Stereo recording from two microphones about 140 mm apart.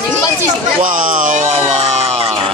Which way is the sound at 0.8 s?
70° right (ahead or behind).